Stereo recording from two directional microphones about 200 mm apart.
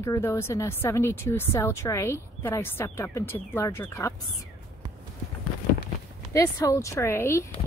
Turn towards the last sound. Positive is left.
turn(degrees=15)  # may be behind; listen again after turning